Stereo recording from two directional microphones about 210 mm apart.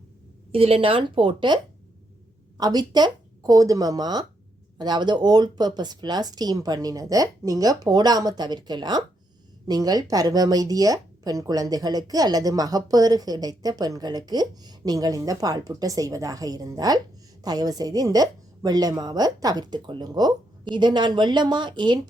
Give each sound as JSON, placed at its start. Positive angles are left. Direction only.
{"t": 0.5, "sound": "a woman's voice", "side_deg": -25}
{"t": 2.6, "sound": "a woman's voice", "side_deg": -20}